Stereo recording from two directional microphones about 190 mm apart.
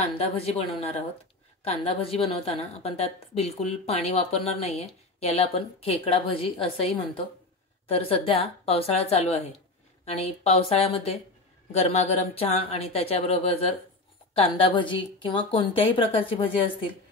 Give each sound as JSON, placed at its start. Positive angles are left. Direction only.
{"t": 0.0, "sound": "a woman's voice", "side_deg": 30}